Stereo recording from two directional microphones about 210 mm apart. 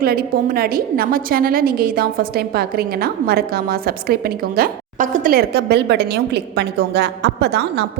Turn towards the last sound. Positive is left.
turn(degrees=-50)  # may be behind; listen again after turning